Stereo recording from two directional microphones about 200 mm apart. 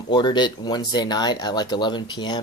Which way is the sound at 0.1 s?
20° left (ahead or behind).